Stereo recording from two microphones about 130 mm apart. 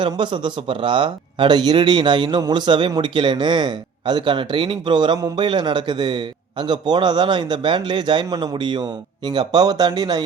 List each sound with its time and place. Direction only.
0.0 s a man's voice: 35° right (ahead or behind)